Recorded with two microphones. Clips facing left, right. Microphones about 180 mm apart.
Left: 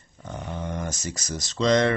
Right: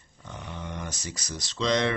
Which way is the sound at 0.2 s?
45° left (ahead or behind).